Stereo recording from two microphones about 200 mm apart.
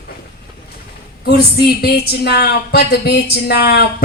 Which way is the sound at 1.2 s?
50° left (ahead or behind).